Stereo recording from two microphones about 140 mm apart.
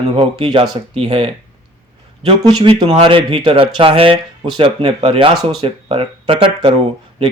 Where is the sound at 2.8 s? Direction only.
40° right (ahead or behind).